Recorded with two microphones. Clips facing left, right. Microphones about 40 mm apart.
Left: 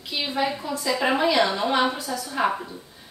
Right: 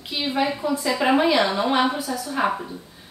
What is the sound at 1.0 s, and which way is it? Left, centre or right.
A woman's voice, centre.